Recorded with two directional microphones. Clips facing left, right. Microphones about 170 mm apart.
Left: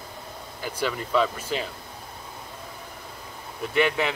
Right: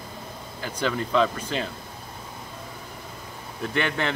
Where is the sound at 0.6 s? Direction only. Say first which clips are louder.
Right 2 dB; 10° left (ahead or behind).